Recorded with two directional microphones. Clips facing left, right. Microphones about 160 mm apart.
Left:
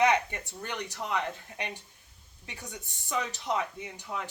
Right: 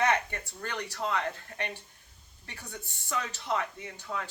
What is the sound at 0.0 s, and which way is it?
Speech, 15° left (ahead or behind).